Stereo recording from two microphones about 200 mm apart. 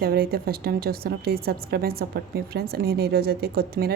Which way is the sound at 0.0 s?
50° right (ahead or behind).